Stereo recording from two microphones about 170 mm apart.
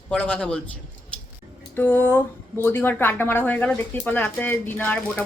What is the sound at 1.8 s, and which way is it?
A woman's voice, 10° left (ahead or behind).